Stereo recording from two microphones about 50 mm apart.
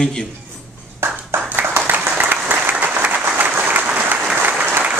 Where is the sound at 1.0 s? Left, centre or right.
Right.